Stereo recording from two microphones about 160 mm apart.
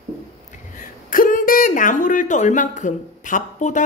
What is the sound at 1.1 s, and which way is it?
Speech, 60° left (ahead or behind).